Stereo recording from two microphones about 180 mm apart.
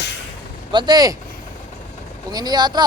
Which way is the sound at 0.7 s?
25° right (ahead or behind).